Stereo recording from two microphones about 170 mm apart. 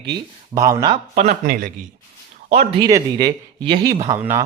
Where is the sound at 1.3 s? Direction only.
55° right (ahead or behind).